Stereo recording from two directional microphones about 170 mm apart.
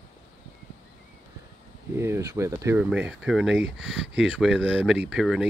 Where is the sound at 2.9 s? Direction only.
5° right (ahead or behind).